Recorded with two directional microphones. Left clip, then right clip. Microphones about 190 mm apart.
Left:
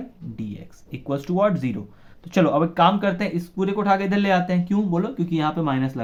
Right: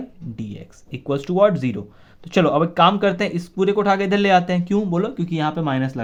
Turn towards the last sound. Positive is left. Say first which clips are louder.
# right 1 dB
turn(degrees=-35)  # may be behind; listen again after turning